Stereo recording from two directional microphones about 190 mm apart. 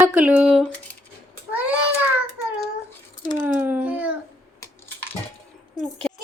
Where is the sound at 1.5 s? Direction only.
5° right (ahead or behind).